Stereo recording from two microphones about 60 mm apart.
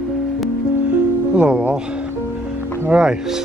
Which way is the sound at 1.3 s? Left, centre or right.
Centre.